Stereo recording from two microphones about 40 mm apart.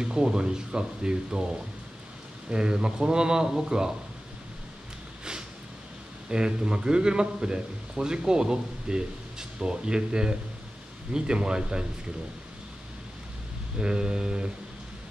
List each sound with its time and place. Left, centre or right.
0.0 s a man's voice: centre
2.5 s a man's voice: right
6.3 s a man's voice: right
13.7 s a man's voice: right